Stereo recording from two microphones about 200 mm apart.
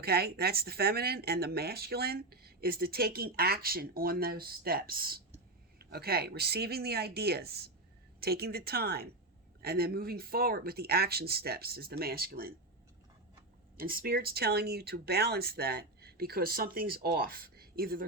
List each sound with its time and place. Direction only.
0.0 s speech: 50° right (ahead or behind)
13.7 s speech: 45° right (ahead or behind)